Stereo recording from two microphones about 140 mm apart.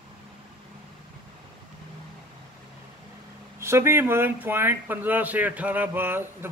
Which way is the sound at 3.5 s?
20° right (ahead or behind).